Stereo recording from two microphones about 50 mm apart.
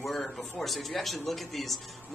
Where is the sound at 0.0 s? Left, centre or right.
Centre.